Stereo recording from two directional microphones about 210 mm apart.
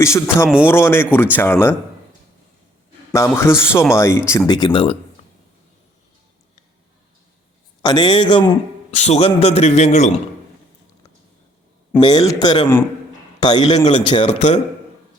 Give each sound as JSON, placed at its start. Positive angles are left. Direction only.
{"t": 0.0, "sound": "speech", "side_deg": 15}
{"t": 0.4, "sound": "speech", "side_deg": -5}
{"t": 0.7, "sound": "speech", "side_deg": 10}
{"t": 3.1, "sound": "a man's voice", "side_deg": 15}
{"t": 7.8, "sound": "a man's voice", "side_deg": 20}
{"t": 11.9, "sound": "a man's voice", "side_deg": 20}